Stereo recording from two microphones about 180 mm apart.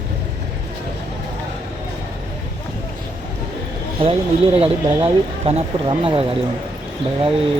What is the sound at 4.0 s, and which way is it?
Speech, 35° right (ahead or behind).